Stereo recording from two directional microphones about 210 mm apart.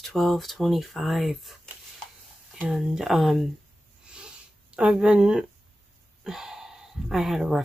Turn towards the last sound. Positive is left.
turn(degrees=0)  # may be behind; listen again after turning